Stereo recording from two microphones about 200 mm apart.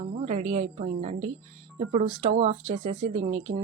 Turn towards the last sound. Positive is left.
turn(degrees=-35)  # may be behind; listen again after turning